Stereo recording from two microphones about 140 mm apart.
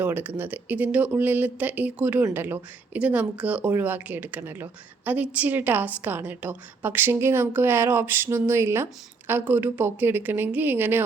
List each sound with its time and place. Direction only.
0.0 s speech: 15° right (ahead or behind)